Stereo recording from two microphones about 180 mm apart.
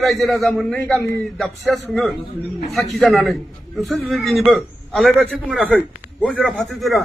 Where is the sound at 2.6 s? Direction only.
35° left (ahead or behind).